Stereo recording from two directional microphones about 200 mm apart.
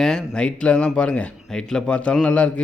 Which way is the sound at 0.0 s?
5° left (ahead or behind).